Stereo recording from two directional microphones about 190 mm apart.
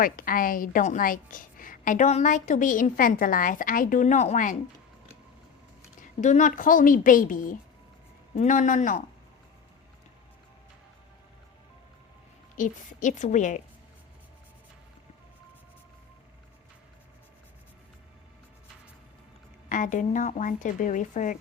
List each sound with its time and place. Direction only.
0.0 s a woman's voice: 50° left (ahead or behind)
6.0 s a woman's voice: 40° left (ahead or behind)
12.5 s a woman's voice: 40° left (ahead or behind)
19.6 s a woman's voice: 45° left (ahead or behind)